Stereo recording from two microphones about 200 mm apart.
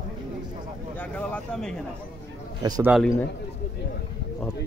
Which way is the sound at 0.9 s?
5° left (ahead or behind).